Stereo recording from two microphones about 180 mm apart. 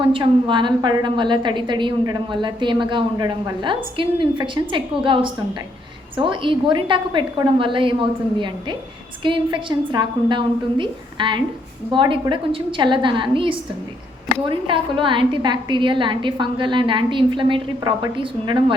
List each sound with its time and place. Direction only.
0.0 s a woman's voice: 30° right (ahead or behind)
9.2 s a woman's voice: 25° right (ahead or behind)